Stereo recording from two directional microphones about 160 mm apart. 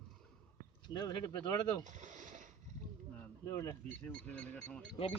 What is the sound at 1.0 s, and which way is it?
Speech, 25° left (ahead or behind).